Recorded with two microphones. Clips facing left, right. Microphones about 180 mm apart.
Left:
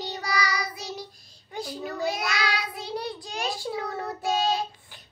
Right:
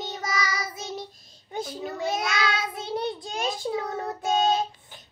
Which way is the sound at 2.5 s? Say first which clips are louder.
Right 2 dB; 25° right (ahead or behind).